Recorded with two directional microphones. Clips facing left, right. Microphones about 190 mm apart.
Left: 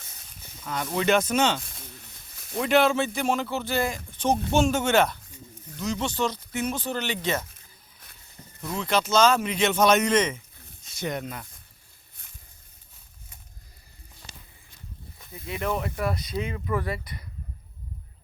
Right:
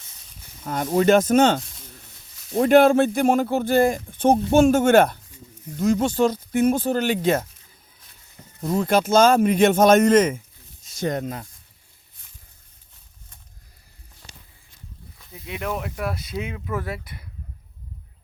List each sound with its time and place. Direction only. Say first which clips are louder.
0.6 s speech: right 7 dB; 50° right (ahead or behind)
1.6 s snake: left 1 dB; 55° left (ahead or behind)
2.5 s speech: right 7 dB; 45° right (ahead or behind)
8.6 s speech: right 6 dB; 50° right (ahead or behind)
15.4 s speech: even; centre (ahead or behind)